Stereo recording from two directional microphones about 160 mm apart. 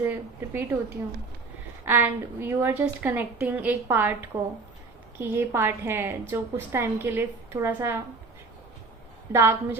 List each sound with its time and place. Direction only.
0.0 s a woman's voice: 15° right (ahead or behind)
1.8 s a woman's voice: 15° right (ahead or behind)
9.3 s a woman's voice: 15° right (ahead or behind)